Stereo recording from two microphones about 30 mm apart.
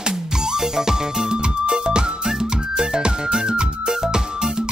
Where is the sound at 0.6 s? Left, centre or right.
Centre.